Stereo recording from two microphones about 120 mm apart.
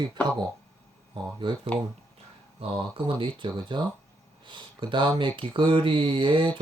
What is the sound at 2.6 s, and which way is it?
Speech, 50° right (ahead or behind).